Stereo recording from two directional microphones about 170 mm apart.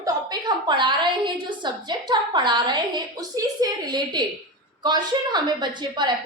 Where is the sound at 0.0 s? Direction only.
25° right (ahead or behind).